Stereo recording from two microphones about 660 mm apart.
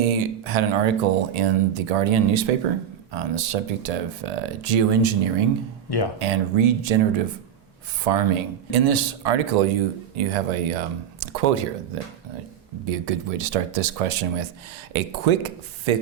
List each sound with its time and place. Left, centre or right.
0.0 s speech: right
12.8 s speech: right